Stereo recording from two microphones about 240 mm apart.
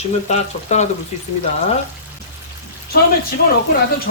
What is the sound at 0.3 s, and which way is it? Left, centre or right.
Speech, left.